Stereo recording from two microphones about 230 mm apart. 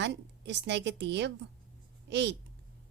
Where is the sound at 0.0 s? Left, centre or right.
Right.